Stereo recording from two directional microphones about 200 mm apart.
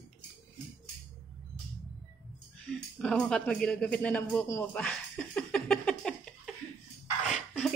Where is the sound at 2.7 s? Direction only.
Centre (ahead or behind).